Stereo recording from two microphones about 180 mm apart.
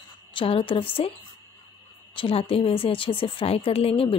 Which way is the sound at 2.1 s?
30° left (ahead or behind).